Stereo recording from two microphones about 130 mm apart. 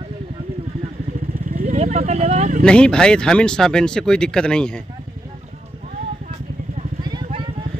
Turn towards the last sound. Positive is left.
turn(degrees=-35)  # may be behind; listen again after turning